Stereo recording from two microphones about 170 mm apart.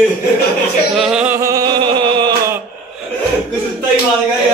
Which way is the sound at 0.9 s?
5° right (ahead or behind).